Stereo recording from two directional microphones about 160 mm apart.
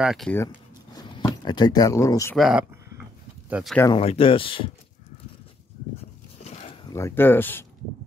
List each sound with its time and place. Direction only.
0.0 s speech: centre (ahead or behind)
0.9 s speech: 25° left (ahead or behind)
2.3 s speech: centre (ahead or behind)
3.9 s speech: 35° left (ahead or behind)
6.9 s speech: 15° left (ahead or behind)